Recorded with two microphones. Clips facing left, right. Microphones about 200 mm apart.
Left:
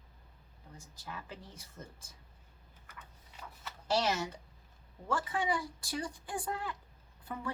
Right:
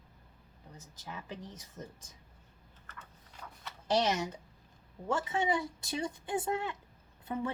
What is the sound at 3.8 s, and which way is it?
Speech, 20° right (ahead or behind).